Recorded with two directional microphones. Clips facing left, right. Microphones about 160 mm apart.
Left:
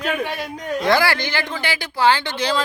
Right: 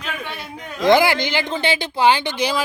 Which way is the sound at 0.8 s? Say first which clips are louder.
Right 4 dB; 20° right (ahead or behind).